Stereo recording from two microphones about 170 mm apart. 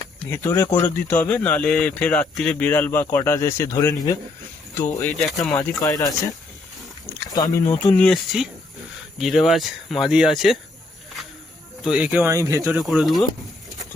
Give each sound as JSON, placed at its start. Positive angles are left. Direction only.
{"t": 0.3, "sound": "speech", "side_deg": 15}
{"t": 5.2, "sound": "speech", "side_deg": 0}
{"t": 5.5, "sound": "speech", "side_deg": 20}
{"t": 7.3, "sound": "speech", "side_deg": 20}
{"t": 8.0, "sound": "speech", "side_deg": 0}
{"t": 11.8, "sound": "speech", "side_deg": -5}
{"t": 12.6, "sound": "speech", "side_deg": 0}